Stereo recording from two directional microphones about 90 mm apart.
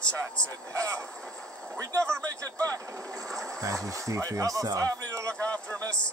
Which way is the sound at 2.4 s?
35° right (ahead or behind).